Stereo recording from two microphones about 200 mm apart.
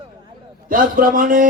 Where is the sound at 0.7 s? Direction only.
45° right (ahead or behind).